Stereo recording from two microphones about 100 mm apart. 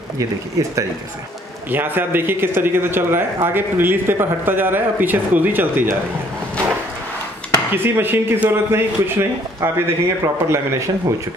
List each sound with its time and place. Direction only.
0.6 s speech: 35° right (ahead or behind)
1.7 s speech: 20° right (ahead or behind)
7.7 s speech: 20° right (ahead or behind)